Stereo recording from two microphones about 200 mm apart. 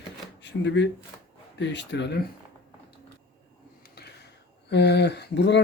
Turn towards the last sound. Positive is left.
turn(degrees=60)  # may be behind; listen again after turning